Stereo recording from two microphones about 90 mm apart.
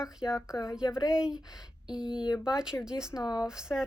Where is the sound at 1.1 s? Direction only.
10° right (ahead or behind).